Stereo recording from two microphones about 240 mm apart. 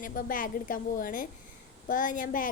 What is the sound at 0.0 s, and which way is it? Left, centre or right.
Speech, left.